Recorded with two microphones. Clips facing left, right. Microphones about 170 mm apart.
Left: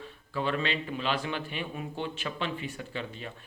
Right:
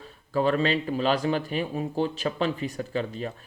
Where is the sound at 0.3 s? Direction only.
40° right (ahead or behind).